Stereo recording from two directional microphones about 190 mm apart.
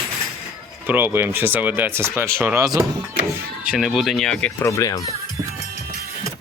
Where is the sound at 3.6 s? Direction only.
Centre (ahead or behind).